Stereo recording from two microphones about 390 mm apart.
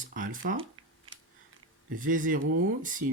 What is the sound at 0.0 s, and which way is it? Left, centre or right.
Speech, centre.